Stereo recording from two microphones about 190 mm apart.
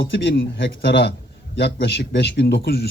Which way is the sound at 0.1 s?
65° left (ahead or behind).